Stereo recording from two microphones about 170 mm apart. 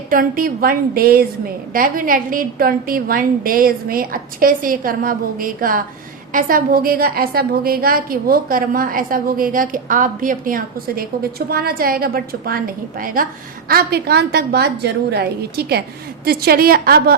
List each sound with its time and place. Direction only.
0.1 s a woman's voice: 55° right (ahead or behind)